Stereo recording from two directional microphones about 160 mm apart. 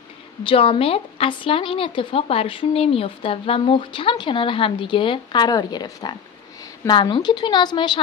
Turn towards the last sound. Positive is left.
turn(degrees=25)  # may be behind; listen again after turning